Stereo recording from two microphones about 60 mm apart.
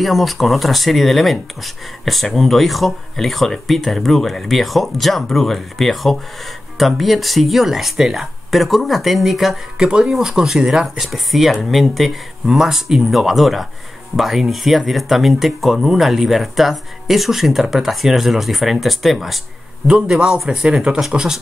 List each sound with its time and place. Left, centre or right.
0.0 s speech: centre
9.8 s speech: centre
19.9 s speech: centre